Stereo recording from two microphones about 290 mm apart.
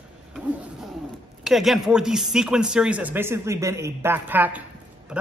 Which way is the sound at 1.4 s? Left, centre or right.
Centre.